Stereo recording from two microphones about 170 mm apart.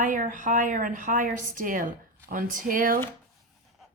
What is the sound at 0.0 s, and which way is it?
Speech, 50° right (ahead or behind).